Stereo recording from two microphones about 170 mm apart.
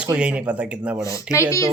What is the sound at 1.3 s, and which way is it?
Speech, 15° left (ahead or behind).